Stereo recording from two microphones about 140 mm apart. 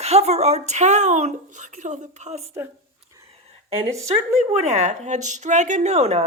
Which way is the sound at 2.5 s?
20° right (ahead or behind).